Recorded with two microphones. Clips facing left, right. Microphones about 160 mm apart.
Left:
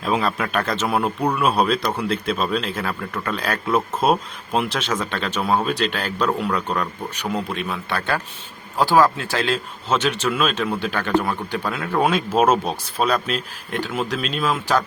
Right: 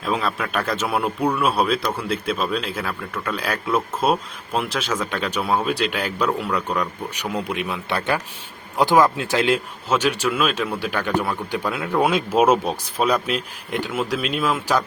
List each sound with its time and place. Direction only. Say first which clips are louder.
0.0 s a man's voice: left 2 dB; centre (ahead or behind)
1.8 s speech: left 1 dB; 5° left (ahead or behind)
2.0 s a man's voice: even; 5° right (ahead or behind)